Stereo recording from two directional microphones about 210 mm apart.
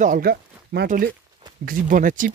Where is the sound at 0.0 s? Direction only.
40° right (ahead or behind).